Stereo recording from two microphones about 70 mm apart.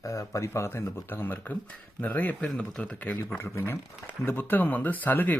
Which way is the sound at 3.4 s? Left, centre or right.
Left.